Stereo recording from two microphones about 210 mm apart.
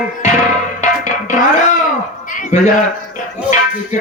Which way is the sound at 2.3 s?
40° left (ahead or behind).